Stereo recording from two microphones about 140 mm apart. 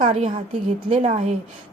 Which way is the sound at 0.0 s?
45° right (ahead or behind).